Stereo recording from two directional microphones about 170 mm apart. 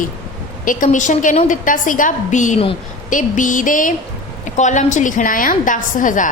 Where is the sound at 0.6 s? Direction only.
50° left (ahead or behind).